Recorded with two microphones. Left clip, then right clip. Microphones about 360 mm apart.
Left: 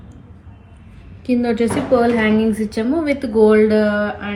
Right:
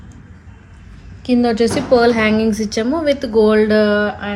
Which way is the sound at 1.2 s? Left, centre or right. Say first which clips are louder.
Right 3 dB; right.